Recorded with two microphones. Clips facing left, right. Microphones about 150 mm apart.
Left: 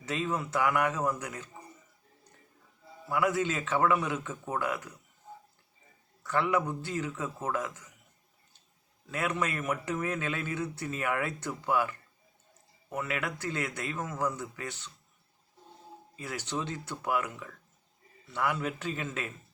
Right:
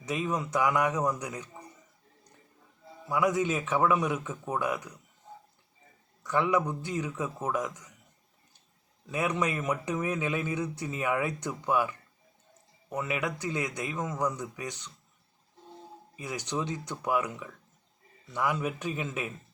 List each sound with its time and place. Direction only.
0.0 s speech: 15° right (ahead or behind)
3.1 s speech: 15° right (ahead or behind)
6.2 s speech: 15° right (ahead or behind)
9.1 s speech: 15° right (ahead or behind)
16.1 s speech: 15° right (ahead or behind)